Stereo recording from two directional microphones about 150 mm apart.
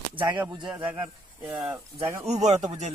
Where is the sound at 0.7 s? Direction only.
15° right (ahead or behind).